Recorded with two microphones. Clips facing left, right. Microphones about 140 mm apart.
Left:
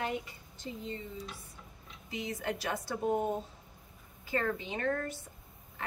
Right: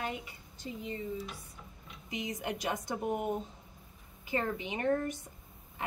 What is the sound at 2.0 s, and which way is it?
Speech, 20° right (ahead or behind).